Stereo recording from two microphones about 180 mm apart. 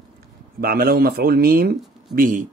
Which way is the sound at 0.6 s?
55° right (ahead or behind).